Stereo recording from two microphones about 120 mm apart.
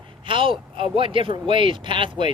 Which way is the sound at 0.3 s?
45° right (ahead or behind).